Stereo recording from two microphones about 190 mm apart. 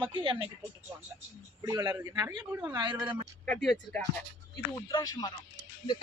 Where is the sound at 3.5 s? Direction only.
Centre (ahead or behind).